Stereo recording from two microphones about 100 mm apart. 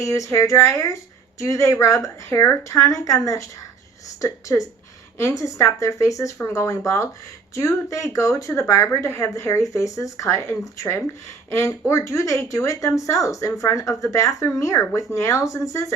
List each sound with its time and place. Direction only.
0.0 s speech: 30° left (ahead or behind)